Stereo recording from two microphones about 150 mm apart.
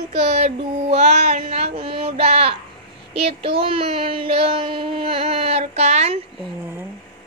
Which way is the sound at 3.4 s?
35° right (ahead or behind).